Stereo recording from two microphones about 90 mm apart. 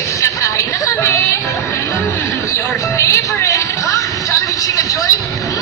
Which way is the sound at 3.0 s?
35° left (ahead or behind).